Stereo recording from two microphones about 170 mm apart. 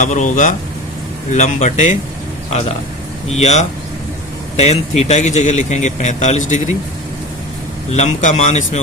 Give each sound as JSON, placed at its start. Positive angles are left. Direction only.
{"t": 0.0, "sound": "speech", "side_deg": 45}
{"t": 3.2, "sound": "speech", "side_deg": 40}
{"t": 7.9, "sound": "speech", "side_deg": 45}